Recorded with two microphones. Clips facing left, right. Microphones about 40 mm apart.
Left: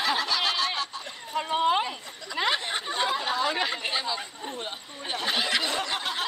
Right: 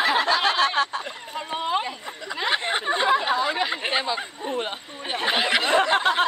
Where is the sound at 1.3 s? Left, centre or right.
Centre.